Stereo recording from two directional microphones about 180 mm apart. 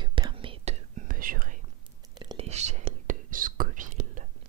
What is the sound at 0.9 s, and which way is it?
Whispering, 50° right (ahead or behind).